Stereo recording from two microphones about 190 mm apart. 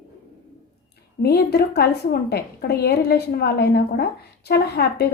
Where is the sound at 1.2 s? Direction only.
55° left (ahead or behind).